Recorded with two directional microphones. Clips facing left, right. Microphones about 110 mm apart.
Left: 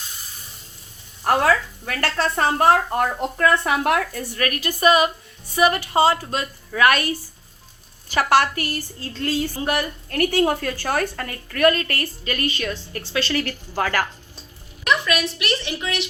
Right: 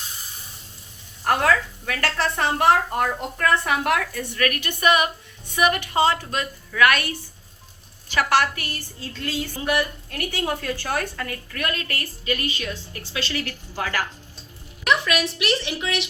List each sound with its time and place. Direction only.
1.2 s speech: 40° left (ahead or behind)
8.1 s a woman's voice: 40° left (ahead or behind); by 14.0 s 60° left (ahead or behind)
14.8 s speech: 15° right (ahead or behind)